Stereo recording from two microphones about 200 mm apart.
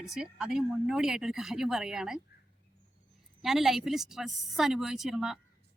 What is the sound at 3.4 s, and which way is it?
Speech, centre (ahead or behind).